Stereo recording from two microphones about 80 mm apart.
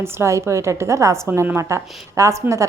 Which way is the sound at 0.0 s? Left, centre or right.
Right.